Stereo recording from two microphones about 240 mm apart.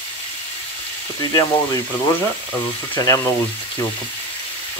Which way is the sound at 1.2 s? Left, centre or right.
Centre.